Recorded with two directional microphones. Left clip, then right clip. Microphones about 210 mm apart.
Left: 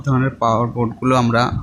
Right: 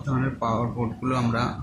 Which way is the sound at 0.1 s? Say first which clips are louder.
Left 9 dB; 50° left (ahead or behind).